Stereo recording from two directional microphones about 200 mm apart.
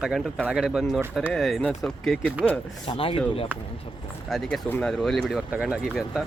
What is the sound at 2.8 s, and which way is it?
Speech, 25° left (ahead or behind).